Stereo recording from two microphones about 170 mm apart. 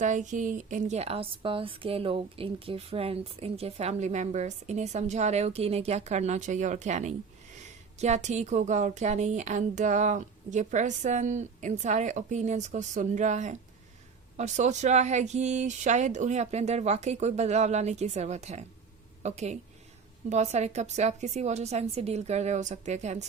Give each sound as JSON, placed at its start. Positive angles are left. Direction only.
{"t": 0.0, "sound": "a woman's voice", "side_deg": -45}